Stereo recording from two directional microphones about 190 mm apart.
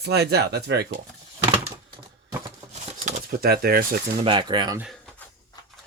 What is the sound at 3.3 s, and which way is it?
Speech, 55° right (ahead or behind).